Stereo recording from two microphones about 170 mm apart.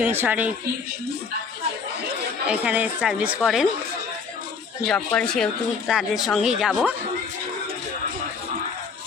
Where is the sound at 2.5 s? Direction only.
10° right (ahead or behind).